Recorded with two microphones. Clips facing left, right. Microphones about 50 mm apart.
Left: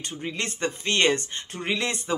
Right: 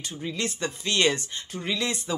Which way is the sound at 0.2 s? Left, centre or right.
Left.